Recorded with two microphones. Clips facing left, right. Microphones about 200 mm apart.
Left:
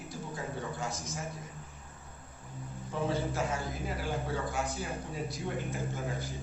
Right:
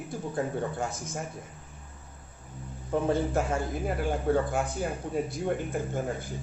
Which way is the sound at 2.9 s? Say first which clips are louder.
Right 6 dB; 50° right (ahead or behind).